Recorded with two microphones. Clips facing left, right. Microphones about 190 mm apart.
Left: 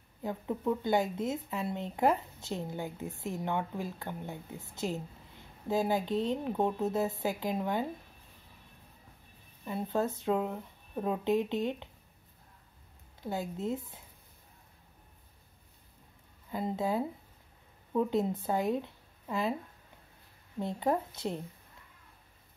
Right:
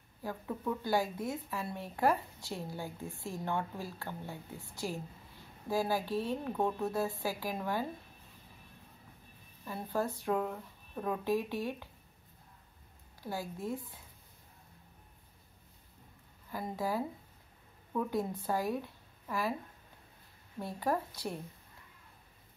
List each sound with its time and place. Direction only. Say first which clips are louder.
0.2 s speech: left 4 dB; 20° left (ahead or behind)
9.7 s speech: left 3 dB; 20° left (ahead or behind)
13.2 s speech: left 4 dB; 20° left (ahead or behind)
16.4 s a woman's voice: left 4 dB; 20° left (ahead or behind)
20.5 s speech: left 3 dB; 20° left (ahead or behind)